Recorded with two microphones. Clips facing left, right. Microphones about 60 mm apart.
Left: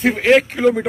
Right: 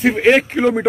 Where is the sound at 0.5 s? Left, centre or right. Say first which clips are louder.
Even; right.